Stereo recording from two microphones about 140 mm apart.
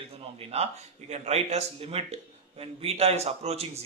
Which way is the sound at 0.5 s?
50° right (ahead or behind).